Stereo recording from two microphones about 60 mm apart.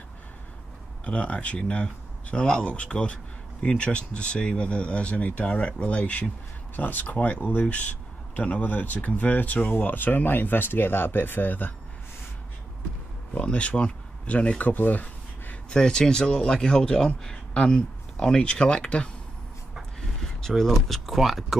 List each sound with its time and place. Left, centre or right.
1.0 s speech: left
13.3 s speech: left
14.7 s a sound: left
15.7 s speech: centre
20.4 s speech: centre